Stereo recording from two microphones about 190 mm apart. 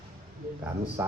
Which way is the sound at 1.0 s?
10° right (ahead or behind).